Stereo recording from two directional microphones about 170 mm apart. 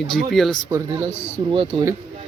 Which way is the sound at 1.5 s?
30° right (ahead or behind).